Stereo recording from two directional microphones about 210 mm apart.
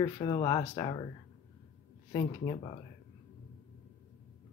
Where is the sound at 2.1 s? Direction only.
20° left (ahead or behind).